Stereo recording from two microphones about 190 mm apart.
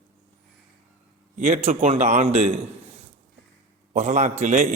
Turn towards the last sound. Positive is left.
turn(degrees=-35)  # may be behind; listen again after turning